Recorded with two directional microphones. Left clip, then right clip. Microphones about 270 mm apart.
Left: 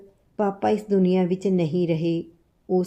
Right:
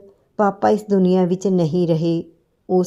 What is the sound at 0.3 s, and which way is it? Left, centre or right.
A woman's voice, right.